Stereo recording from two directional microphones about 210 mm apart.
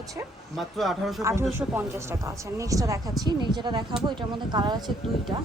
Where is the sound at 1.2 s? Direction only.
10° right (ahead or behind).